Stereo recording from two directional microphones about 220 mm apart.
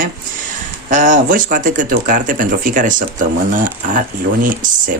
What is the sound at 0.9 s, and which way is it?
Speech, 35° right (ahead or behind).